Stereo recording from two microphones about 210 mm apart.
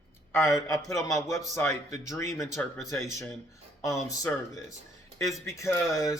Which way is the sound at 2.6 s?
Centre (ahead or behind).